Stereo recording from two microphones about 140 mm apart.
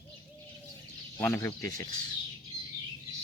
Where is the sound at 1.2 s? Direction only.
15° left (ahead or behind).